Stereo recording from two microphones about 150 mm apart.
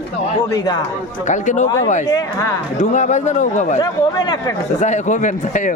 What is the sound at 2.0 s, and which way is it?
Speech, 25° left (ahead or behind).